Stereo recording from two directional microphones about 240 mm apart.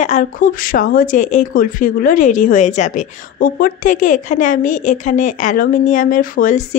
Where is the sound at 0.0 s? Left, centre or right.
Left.